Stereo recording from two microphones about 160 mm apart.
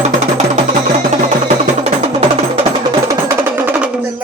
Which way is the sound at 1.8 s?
40° right (ahead or behind).